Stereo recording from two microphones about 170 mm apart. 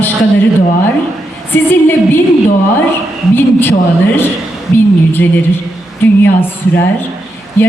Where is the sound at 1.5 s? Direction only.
10° left (ahead or behind).